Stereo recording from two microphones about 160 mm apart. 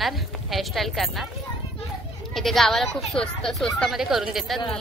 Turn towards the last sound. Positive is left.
turn(degrees=0)  # may be behind; listen again after turning